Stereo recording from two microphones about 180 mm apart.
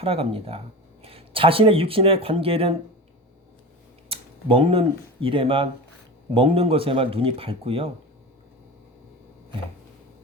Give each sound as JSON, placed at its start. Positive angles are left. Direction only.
{"t": 0.0, "sound": "speech", "side_deg": -30}
{"t": 4.1, "sound": "speech", "side_deg": -30}